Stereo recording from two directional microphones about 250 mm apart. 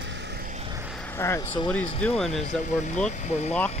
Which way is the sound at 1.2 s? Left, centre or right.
Centre.